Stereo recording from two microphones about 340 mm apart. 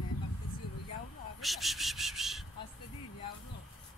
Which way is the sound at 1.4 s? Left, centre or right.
Centre.